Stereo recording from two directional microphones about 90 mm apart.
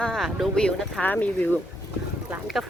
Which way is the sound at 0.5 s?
5° left (ahead or behind).